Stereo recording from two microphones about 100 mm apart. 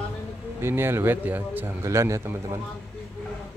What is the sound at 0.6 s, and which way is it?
Speech, 25° right (ahead or behind).